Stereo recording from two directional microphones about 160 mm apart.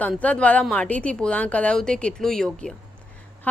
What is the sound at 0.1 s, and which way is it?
A woman's voice, 10° left (ahead or behind).